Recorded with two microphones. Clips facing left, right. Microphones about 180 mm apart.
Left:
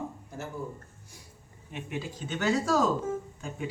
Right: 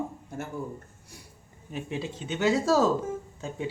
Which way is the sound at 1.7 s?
30° right (ahead or behind).